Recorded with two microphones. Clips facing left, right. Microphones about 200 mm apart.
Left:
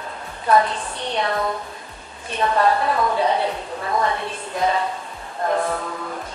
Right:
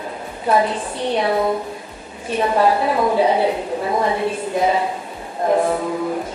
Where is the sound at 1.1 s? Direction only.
10° right (ahead or behind).